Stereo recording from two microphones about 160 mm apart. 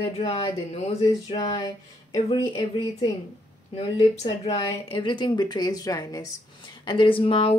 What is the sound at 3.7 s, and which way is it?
Speech, 40° left (ahead or behind).